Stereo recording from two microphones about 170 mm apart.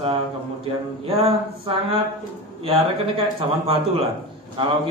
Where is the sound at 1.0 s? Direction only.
35° right (ahead or behind).